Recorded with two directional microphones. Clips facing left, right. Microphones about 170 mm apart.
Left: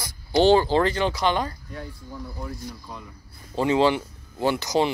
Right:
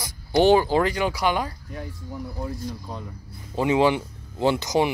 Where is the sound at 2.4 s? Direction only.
30° right (ahead or behind).